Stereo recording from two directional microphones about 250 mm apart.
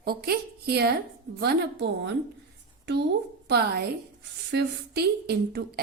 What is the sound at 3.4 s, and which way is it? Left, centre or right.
A woman's voice, right.